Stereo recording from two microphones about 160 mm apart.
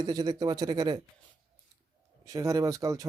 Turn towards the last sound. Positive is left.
turn(degrees=-20)  # may be behind; listen again after turning